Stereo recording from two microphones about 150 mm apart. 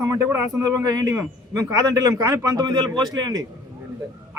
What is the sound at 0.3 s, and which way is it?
A man's voice, 20° right (ahead or behind).